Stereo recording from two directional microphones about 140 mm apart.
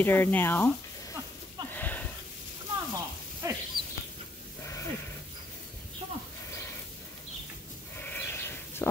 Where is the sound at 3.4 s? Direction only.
20° right (ahead or behind).